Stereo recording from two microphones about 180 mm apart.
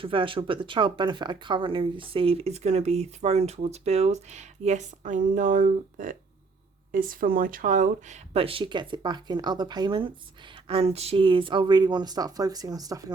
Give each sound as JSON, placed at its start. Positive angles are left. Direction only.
{"t": 0.0, "sound": "speech", "side_deg": -30}